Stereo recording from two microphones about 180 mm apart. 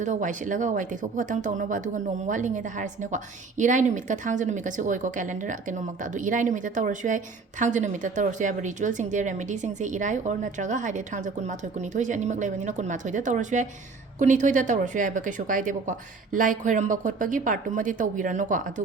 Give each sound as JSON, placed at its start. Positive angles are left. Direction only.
{"t": 0.0, "sound": "speech", "side_deg": -45}